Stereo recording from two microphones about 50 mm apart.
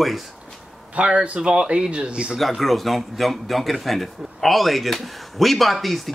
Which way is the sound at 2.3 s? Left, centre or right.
Centre.